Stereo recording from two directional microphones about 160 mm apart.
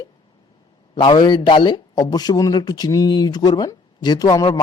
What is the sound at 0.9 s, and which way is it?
Speech, 30° left (ahead or behind).